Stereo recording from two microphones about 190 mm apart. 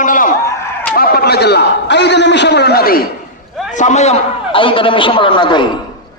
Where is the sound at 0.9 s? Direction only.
50° left (ahead or behind).